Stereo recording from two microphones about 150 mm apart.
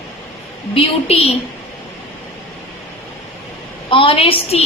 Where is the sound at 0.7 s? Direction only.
40° left (ahead or behind).